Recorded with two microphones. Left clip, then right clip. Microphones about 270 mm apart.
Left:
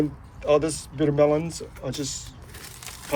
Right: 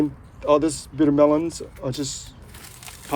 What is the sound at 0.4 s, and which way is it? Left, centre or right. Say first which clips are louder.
Speech: right 2 dB; centre.